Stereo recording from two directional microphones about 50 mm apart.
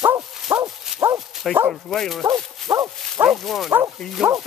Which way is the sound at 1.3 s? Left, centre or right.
Centre.